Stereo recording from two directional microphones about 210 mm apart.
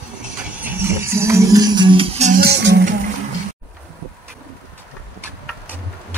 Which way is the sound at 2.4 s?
55° right (ahead or behind).